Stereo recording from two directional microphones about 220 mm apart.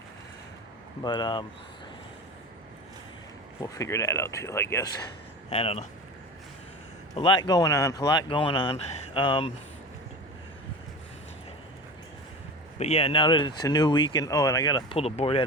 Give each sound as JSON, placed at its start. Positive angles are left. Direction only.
{"t": 1.0, "sound": "speech", "side_deg": 20}
{"t": 3.6, "sound": "speech", "side_deg": 15}
{"t": 5.5, "sound": "speech", "side_deg": 25}
{"t": 7.2, "sound": "speech", "side_deg": 25}
{"t": 12.8, "sound": "speech", "side_deg": 30}